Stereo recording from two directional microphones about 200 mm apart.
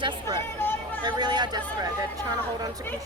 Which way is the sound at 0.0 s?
20° right (ahead or behind).